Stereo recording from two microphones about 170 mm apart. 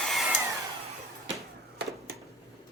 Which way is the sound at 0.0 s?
Centre (ahead or behind).